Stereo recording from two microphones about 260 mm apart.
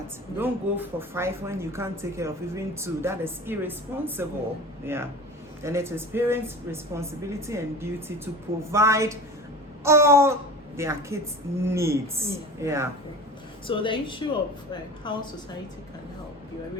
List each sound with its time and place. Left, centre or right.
0.3 s speech: centre
13.7 s speech: centre